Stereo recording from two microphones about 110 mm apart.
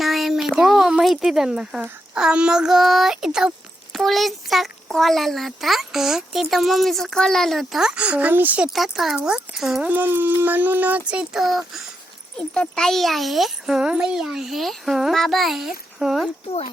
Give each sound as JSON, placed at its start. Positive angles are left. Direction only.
{"t": 0.0, "sound": "a child's voice", "side_deg": 0}
{"t": 9.9, "sound": "speech", "side_deg": -20}